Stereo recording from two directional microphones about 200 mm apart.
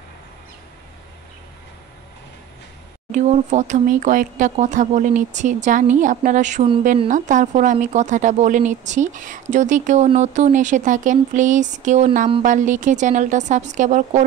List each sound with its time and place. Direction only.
3.1 s speech: 35° right (ahead or behind)